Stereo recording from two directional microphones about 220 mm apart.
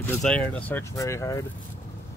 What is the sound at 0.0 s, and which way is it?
Speech, 5° left (ahead or behind).